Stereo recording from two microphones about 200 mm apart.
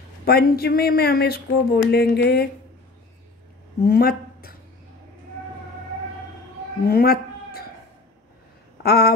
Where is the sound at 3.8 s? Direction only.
50° left (ahead or behind).